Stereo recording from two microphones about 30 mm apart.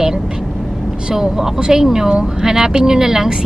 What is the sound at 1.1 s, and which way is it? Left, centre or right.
Speech, centre.